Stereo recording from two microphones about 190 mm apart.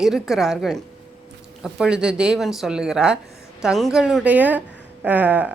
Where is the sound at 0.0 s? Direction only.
Centre (ahead or behind).